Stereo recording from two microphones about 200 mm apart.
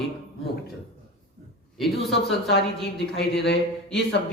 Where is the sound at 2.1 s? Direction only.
55° left (ahead or behind).